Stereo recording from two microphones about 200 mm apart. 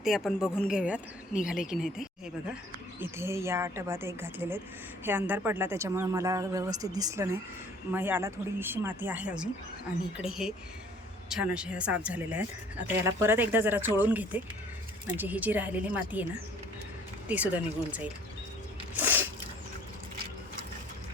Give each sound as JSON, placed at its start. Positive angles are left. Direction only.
{"t": 0.0, "sound": "speech", "side_deg": 0}
{"t": 17.2, "sound": "speech", "side_deg": -5}
{"t": 18.9, "sound": "a sound", "side_deg": -10}